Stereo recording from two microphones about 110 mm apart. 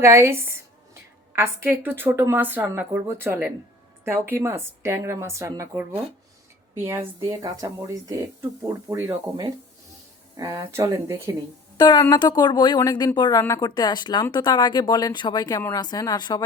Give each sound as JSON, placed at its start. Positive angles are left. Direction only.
{"t": 0.0, "sound": "speech", "side_deg": -25}
{"t": 6.7, "sound": "speech", "side_deg": -25}
{"t": 7.3, "sound": "speech", "side_deg": -35}
{"t": 10.6, "sound": "speech", "side_deg": -25}
{"t": 11.8, "sound": "speech", "side_deg": 35}
{"t": 13.4, "sound": "speech", "side_deg": 30}